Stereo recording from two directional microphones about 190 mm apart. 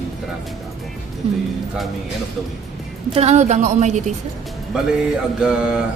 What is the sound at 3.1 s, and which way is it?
Speech, 35° right (ahead or behind).